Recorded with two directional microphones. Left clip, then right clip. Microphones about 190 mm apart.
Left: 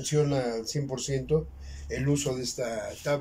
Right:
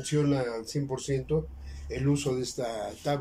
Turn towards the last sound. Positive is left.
turn(degrees=-20)  # may be behind; listen again after turning